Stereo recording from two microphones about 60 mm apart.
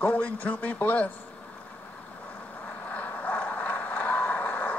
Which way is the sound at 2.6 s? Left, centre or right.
Left.